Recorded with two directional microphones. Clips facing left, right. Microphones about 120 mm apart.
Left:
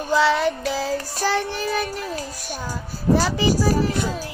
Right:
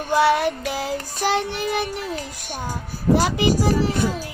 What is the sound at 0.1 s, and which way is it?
Speech, 15° right (ahead or behind).